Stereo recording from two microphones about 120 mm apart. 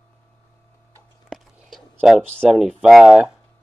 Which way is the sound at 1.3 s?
Centre (ahead or behind).